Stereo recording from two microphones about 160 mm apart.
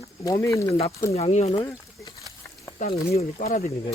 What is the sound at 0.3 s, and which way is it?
Speech, 20° left (ahead or behind).